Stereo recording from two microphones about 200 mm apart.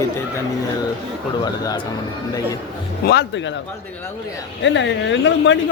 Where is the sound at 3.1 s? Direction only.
60° left (ahead or behind).